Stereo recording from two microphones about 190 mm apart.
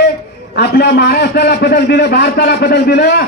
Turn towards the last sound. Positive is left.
turn(degrees=60)  # may be behind; listen again after turning